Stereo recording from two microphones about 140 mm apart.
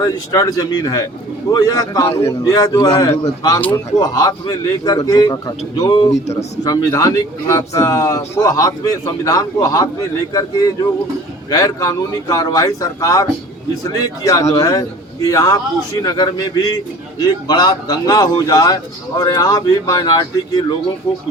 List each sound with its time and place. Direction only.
0.0 s a man's voice: 25° left (ahead or behind)
11.5 s a man's voice: 25° left (ahead or behind)